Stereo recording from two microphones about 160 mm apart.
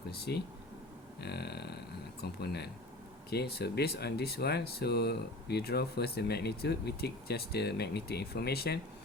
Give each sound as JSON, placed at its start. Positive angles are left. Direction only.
{"t": 0.3, "sound": "speech", "side_deg": 90}